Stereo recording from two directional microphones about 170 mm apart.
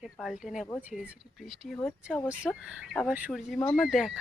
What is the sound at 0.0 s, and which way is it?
Speech, centre (ahead or behind).